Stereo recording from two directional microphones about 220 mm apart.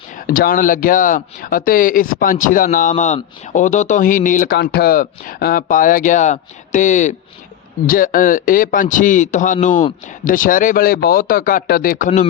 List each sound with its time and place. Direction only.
0.3 s speech: 40° left (ahead or behind)